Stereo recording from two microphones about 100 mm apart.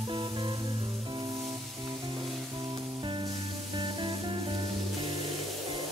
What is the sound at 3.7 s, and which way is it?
Music, 55° right (ahead or behind).